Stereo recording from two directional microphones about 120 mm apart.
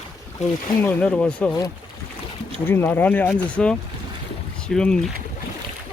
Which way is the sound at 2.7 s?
15° left (ahead or behind).